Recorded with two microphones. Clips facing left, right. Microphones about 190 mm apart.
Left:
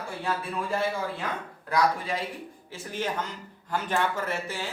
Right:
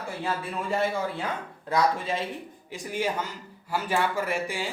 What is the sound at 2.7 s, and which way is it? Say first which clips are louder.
Speech: right 3 dB; 15° right (ahead or behind).